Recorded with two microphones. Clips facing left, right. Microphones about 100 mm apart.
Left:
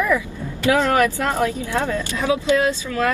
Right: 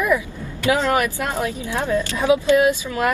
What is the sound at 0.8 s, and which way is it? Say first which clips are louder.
Speech: left 2 dB; 55° left (ahead or behind).